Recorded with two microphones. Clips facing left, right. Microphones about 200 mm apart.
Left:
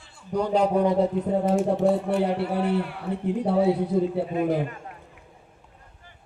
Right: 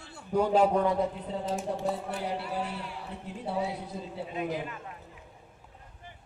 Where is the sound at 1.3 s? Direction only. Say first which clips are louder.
Left 10 dB; 55° left (ahead or behind).